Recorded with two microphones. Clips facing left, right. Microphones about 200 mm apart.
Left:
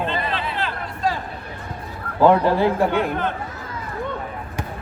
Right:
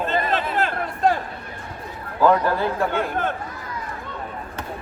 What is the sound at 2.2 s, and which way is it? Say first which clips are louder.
Speech: left 3 dB; 20° left (ahead or behind).